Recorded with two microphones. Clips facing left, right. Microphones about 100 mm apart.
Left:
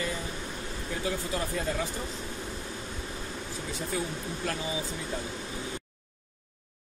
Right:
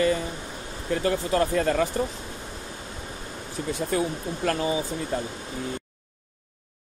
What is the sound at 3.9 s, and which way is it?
Speech, 65° right (ahead or behind).